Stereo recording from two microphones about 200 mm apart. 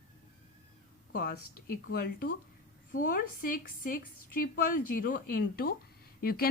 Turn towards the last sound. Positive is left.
turn(degrees=50)  # may be behind; listen again after turning